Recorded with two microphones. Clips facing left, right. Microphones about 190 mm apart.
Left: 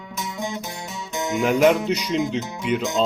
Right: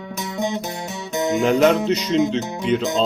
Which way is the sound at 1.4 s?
10° left (ahead or behind).